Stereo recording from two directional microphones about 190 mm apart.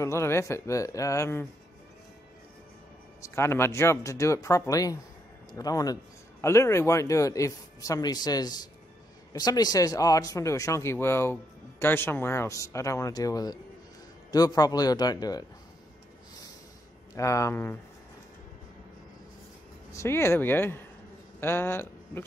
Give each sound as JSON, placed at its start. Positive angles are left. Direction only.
{"t": 0.0, "sound": "a man's voice", "side_deg": 15}
{"t": 3.2, "sound": "a man's voice", "side_deg": 15}
{"t": 17.1, "sound": "a man's voice", "side_deg": 15}
{"t": 19.9, "sound": "a man's voice", "side_deg": 15}